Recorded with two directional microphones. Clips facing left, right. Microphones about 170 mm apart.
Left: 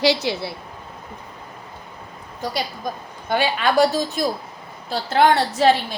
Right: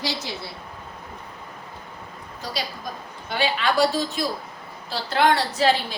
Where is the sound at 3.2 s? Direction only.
50° left (ahead or behind).